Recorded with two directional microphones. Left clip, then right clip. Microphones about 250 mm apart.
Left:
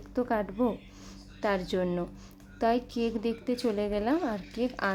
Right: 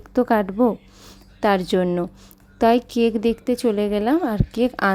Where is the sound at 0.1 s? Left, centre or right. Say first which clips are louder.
Right 11 dB; right.